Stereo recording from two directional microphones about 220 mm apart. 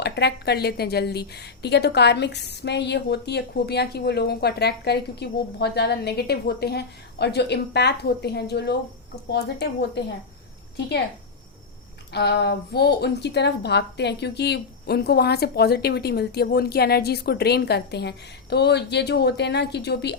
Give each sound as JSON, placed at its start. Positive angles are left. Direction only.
{"t": 0.0, "sound": "a woman's voice", "side_deg": 50}
{"t": 12.1, "sound": "a woman's voice", "side_deg": 50}